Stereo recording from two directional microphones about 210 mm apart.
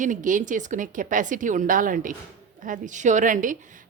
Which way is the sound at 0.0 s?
35° right (ahead or behind).